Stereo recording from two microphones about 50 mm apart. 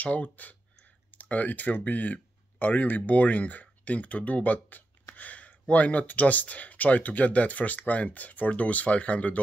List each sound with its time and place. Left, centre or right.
0.0 s speech: left